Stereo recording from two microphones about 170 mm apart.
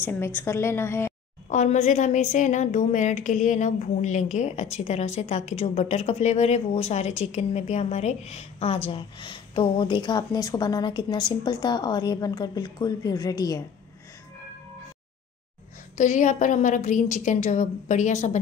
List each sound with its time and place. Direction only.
0.0 s a woman's voice: 15° left (ahead or behind)
1.5 s a woman's voice: 45° left (ahead or behind); by 13.7 s 20° left (ahead or behind)
16.0 s a woman's voice: 45° left (ahead or behind)